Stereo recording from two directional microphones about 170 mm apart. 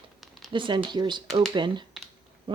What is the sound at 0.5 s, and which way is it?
Speech, 30° right (ahead or behind).